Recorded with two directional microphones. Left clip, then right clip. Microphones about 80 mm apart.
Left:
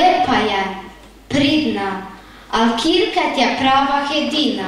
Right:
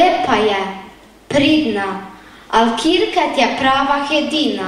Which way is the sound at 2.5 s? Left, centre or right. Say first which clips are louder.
Right 2 dB; right.